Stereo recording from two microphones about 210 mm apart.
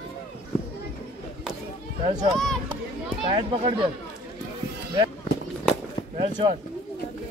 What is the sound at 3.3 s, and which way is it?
Speech, 25° right (ahead or behind).